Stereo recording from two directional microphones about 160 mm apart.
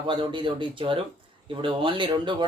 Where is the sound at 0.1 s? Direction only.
30° right (ahead or behind).